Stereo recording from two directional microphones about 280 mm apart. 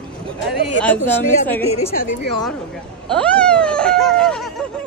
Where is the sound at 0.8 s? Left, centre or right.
Centre.